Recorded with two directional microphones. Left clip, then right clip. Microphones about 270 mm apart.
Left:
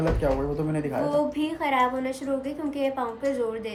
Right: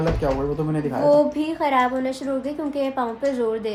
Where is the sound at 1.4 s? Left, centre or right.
Right.